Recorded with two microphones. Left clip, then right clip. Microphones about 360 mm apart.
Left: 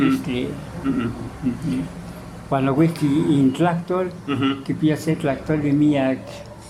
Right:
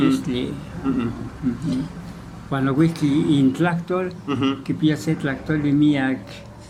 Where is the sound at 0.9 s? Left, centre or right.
Centre.